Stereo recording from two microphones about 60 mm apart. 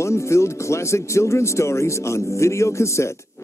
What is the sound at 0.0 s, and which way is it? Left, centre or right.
Speech, left.